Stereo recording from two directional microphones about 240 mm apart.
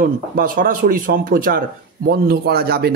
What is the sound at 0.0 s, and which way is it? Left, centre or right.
Speech, right.